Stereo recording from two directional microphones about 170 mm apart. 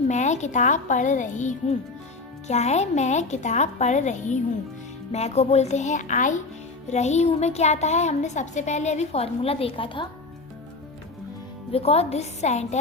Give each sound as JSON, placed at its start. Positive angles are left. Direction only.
{"t": 0.1, "sound": "a woman's voice", "side_deg": 45}
{"t": 11.7, "sound": "a woman's voice", "side_deg": 35}